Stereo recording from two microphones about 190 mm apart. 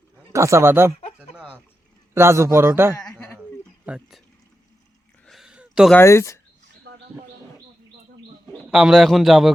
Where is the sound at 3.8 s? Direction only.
5° right (ahead or behind).